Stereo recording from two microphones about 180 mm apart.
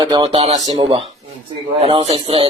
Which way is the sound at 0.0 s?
20° right (ahead or behind).